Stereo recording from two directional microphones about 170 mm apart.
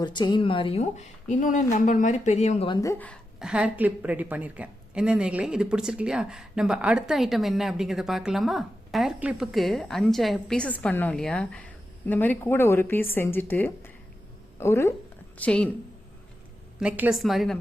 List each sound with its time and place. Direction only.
0.0 s a woman's voice: 25° left (ahead or behind); by 2.6 s 40° left (ahead or behind)
2.6 s speech: 25° left (ahead or behind)
3.4 s speech: 5° right (ahead or behind)
16.8 s speech: 5° right (ahead or behind)